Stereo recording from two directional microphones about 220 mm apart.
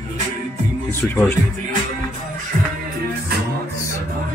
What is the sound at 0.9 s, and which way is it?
Speech, 10° left (ahead or behind).